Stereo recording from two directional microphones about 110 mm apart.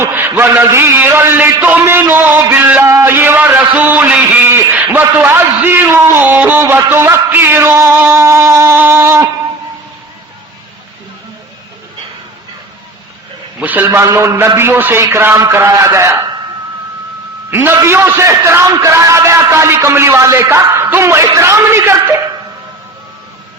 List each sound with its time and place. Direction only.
0.0 s a man's voice: 20° right (ahead or behind)
1.8 s a sound: 20° right (ahead or behind)
8.0 s a man's voice: 25° right (ahead or behind)
13.6 s a man's voice: 15° right (ahead or behind)
17.5 s a man's voice: 20° right (ahead or behind)